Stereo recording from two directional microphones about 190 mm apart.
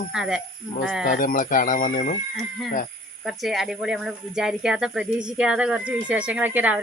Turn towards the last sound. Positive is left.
turn(degrees=-10)  # may be behind; listen again after turning